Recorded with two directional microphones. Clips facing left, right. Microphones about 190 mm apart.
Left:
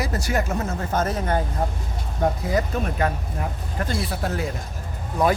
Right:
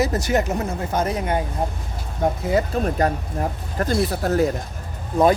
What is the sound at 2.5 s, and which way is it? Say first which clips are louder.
Speech: right 3 dB; 35° right (ahead or behind).